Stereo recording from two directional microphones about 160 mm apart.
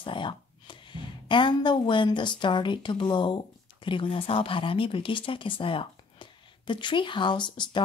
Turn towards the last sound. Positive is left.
turn(degrees=30)  # may be behind; listen again after turning